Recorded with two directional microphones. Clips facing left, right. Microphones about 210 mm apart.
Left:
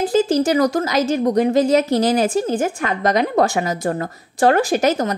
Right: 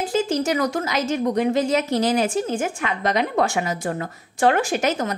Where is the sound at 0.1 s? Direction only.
35° left (ahead or behind).